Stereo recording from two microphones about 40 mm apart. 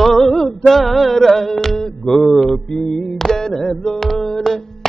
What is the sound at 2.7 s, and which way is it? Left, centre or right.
Music, centre.